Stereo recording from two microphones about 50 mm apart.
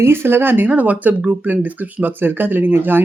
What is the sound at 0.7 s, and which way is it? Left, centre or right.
Speech, right.